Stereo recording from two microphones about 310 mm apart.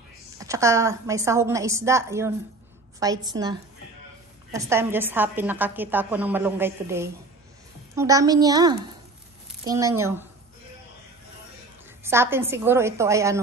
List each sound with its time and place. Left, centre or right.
0.4 s a woman's voice: centre
12.0 s a woman's voice: centre